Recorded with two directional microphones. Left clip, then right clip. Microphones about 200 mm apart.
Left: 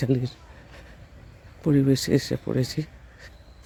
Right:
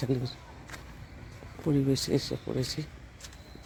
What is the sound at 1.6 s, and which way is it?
Speech, 55° left (ahead or behind).